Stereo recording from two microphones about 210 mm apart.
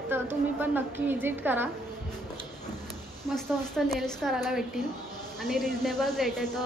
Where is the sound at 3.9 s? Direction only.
Centre (ahead or behind).